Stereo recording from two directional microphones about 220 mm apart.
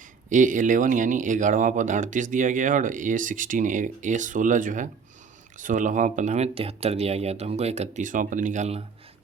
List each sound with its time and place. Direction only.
0.3 s speech: 35° right (ahead or behind)